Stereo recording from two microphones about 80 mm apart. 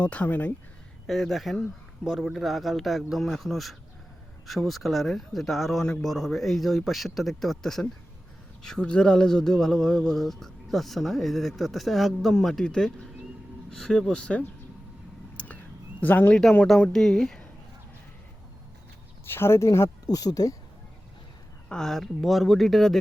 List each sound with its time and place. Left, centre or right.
0.0 s speech: centre
1.0 s speech: centre
15.4 s a sound: centre
16.0 s speech: left
16.9 s speech: centre
19.3 s speech: left
20.1 s speech: left
21.7 s speech: centre